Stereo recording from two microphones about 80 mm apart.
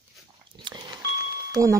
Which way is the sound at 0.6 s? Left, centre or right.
Right.